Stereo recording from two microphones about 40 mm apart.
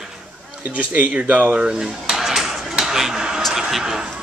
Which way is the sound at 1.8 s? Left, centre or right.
Centre.